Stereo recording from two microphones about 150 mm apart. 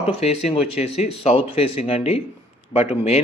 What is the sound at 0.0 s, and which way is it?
Speech, 40° left (ahead or behind).